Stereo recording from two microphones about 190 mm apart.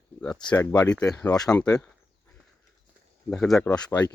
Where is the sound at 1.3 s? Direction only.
20° left (ahead or behind).